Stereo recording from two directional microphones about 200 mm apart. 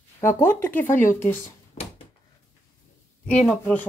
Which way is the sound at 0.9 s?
40° left (ahead or behind).